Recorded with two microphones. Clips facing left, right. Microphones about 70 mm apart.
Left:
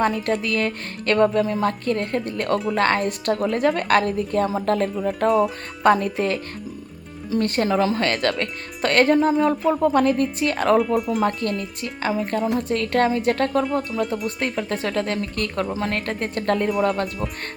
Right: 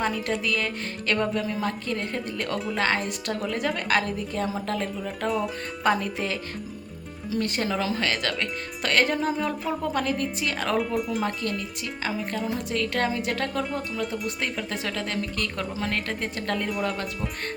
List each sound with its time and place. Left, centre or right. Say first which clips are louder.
0.0 s speech: left 5 dB; left
12.5 s speech: left 6 dB; left